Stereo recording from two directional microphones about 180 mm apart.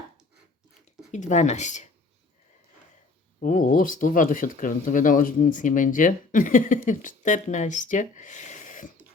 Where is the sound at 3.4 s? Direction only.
45° left (ahead or behind).